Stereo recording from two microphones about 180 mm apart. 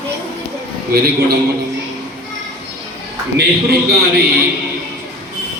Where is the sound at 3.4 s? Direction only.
60° right (ahead or behind).